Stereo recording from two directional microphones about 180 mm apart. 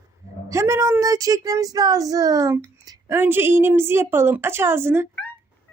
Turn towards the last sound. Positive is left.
turn(degrees=-15)  # may be behind; listen again after turning